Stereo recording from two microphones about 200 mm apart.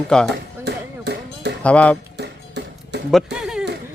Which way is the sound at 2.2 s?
55° right (ahead or behind).